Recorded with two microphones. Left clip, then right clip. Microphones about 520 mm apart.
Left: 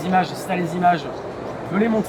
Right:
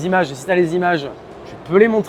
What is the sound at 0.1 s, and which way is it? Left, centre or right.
Speech, right.